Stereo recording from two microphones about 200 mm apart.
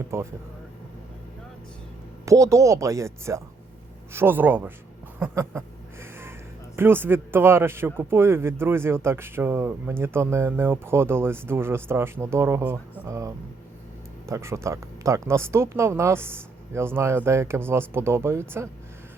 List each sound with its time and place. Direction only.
0.1 s speech: 15° right (ahead or behind)
2.2 s speech: 15° right (ahead or behind)
5.2 s a sound: 15° right (ahead or behind)
6.7 s speech: 10° right (ahead or behind)